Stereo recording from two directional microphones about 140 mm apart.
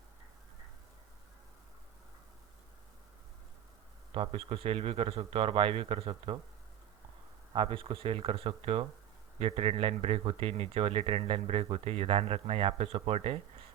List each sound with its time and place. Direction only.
4.1 s speech: 45° right (ahead or behind)
7.5 s speech: 40° right (ahead or behind)